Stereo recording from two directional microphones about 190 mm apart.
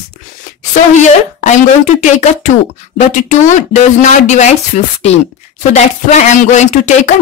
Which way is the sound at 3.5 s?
40° left (ahead or behind).